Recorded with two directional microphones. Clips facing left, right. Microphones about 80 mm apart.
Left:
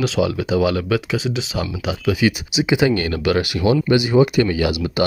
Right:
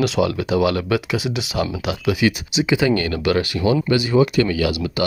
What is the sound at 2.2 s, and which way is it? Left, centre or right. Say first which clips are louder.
Speech: even; centre.